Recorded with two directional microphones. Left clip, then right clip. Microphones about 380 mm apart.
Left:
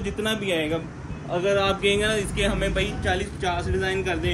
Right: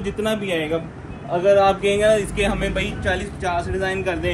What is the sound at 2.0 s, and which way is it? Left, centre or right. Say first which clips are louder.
Speech: right 7 dB; centre.